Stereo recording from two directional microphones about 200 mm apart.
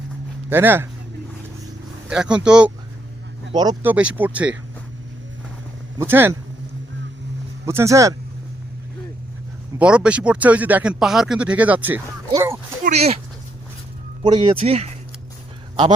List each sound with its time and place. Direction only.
0.5 s speech: 10° right (ahead or behind)
2.0 s speech: 5° right (ahead or behind)
3.5 s speech: 20° right (ahead or behind)
3.8 s speech: 5° right (ahead or behind)
6.0 s speech: 10° right (ahead or behind)
7.6 s speech: 15° right (ahead or behind)
9.7 s speech: 5° right (ahead or behind)
12.8 s speech: 35° right (ahead or behind)
14.2 s speech: 25° right (ahead or behind)